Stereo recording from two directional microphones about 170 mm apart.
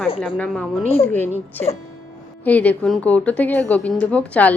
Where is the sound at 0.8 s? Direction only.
35° left (ahead or behind).